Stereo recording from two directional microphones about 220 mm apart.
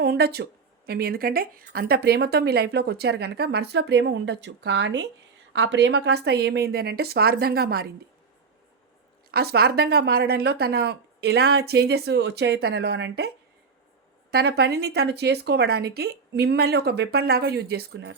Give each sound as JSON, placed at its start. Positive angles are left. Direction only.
{"t": 0.0, "sound": "a woman's voice", "side_deg": -45}
{"t": 9.3, "sound": "a woman's voice", "side_deg": -45}